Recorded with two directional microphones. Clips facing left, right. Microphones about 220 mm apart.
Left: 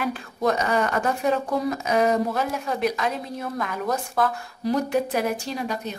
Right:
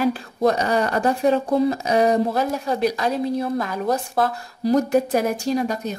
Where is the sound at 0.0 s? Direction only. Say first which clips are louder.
Right 5 dB; 35° right (ahead or behind).